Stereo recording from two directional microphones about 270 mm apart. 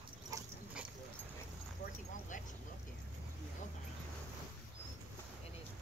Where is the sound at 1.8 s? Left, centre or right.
Left.